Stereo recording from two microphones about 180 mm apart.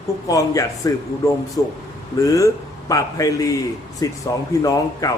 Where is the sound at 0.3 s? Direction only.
20° left (ahead or behind).